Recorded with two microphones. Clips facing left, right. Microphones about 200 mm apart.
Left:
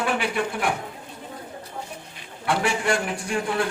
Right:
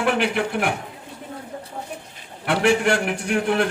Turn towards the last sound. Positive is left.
turn(degrees=-70)  # may be behind; listen again after turning